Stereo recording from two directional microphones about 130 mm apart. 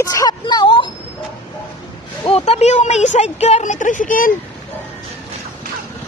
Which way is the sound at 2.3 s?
55° left (ahead or behind).